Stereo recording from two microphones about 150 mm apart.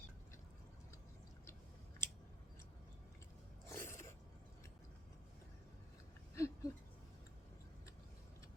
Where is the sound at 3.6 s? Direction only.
15° left (ahead or behind).